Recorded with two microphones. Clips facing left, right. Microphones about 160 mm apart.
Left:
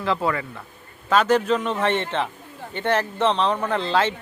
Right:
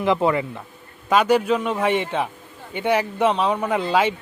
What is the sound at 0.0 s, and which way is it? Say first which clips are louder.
Speech: right 4 dB; 20° right (ahead or behind).